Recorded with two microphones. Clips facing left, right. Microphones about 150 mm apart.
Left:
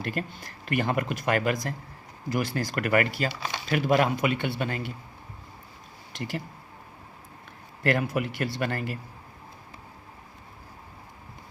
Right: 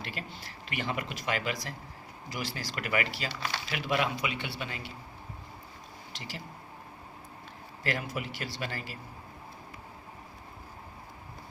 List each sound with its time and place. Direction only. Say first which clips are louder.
0.0 s speech: left 8 dB; 50° left (ahead or behind)
6.1 s speech: left 10 dB; 55° left (ahead or behind)
7.9 s speech: left 8 dB; 60° left (ahead or behind)